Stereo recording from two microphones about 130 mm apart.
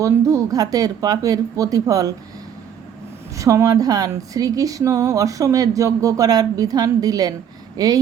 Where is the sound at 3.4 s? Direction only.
25° right (ahead or behind).